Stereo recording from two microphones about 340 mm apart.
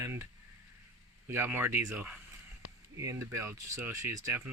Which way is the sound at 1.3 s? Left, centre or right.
Centre.